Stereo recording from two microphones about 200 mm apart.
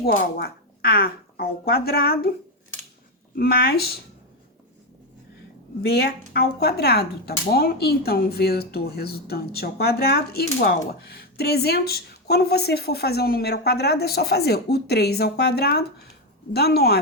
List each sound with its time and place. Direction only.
0.3 s speech: 50° left (ahead or behind)
3.3 s speech: 50° left (ahead or behind)
5.8 s speech: 50° left (ahead or behind)